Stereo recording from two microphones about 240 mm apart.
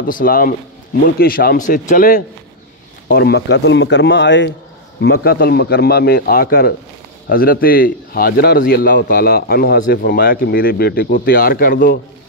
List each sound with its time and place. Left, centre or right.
0.0 s a man's voice: left